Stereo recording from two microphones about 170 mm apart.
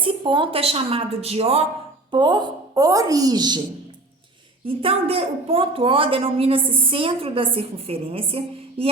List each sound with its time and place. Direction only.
0.0 s a woman's voice: 30° right (ahead or behind)
2.0 s a woman's voice: 25° right (ahead or behind)
4.6 s a woman's voice: 35° right (ahead or behind)